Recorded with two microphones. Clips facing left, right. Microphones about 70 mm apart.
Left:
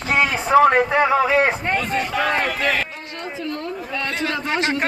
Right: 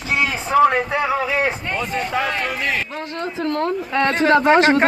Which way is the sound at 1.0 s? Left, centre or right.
Left.